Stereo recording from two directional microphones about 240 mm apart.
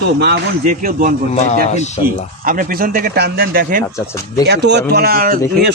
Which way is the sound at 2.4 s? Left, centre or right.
Right.